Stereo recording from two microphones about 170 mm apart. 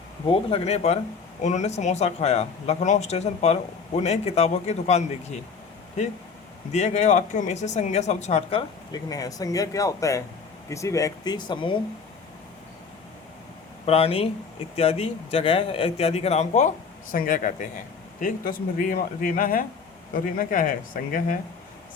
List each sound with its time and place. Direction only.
0.3 s speech: 35° left (ahead or behind)
6.7 s speech: 40° left (ahead or behind)
13.8 s speech: 35° left (ahead or behind); by 21.3 s 55° left (ahead or behind)